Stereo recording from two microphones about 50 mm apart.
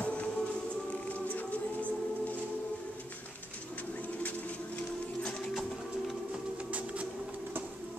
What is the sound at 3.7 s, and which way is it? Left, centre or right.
Bird, left.